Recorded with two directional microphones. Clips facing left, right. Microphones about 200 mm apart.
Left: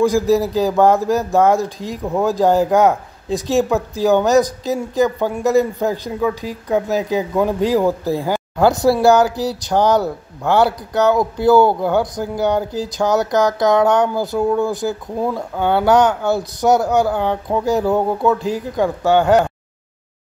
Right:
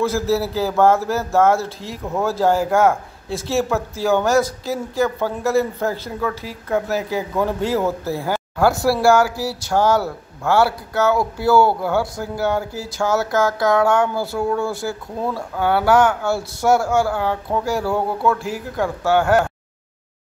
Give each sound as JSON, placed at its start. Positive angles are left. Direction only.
{"t": 0.0, "sound": "speech", "side_deg": 15}